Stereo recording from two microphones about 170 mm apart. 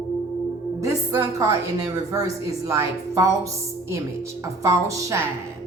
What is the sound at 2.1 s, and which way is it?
A woman's voice, 20° right (ahead or behind).